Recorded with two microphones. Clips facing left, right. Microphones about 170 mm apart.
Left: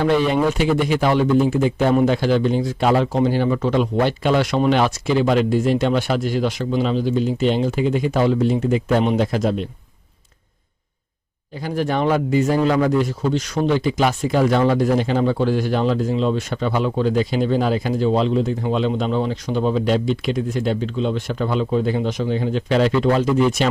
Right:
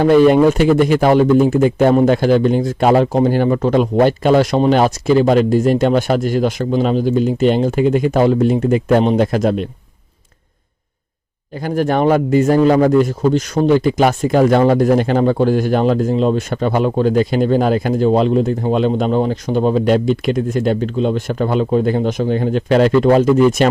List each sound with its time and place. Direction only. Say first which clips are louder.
0.0 s speech: right 8 dB; 45° right (ahead or behind)
11.5 s speech: right 5 dB; 50° right (ahead or behind)